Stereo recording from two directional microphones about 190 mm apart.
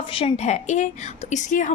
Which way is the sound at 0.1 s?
30° left (ahead or behind).